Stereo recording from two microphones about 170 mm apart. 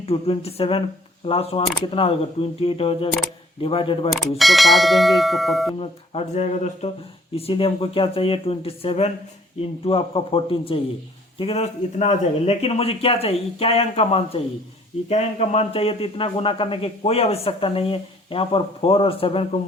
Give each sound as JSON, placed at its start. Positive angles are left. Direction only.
{"t": 0.0, "sound": "a man's voice", "side_deg": 35}
{"t": 4.1, "sound": "bell", "side_deg": 0}
{"t": 5.8, "sound": "a man's voice", "side_deg": 40}